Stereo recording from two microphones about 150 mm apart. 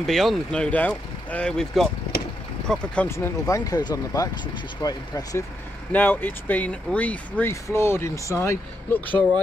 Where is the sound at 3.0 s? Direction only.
15° left (ahead or behind).